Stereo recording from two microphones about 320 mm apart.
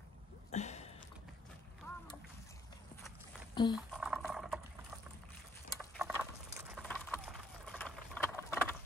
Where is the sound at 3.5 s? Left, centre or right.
Centre.